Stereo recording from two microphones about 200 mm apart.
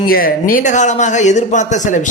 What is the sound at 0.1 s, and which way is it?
A man's voice, 45° left (ahead or behind).